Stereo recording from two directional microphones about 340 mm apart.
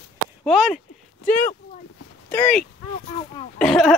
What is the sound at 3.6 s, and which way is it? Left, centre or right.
Speech, centre.